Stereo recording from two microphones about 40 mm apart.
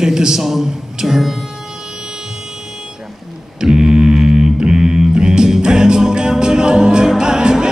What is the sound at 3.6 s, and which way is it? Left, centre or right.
Music, centre.